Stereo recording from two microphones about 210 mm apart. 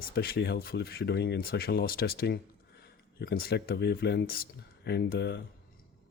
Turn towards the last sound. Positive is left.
turn(degrees=50)  # may be behind; listen again after turning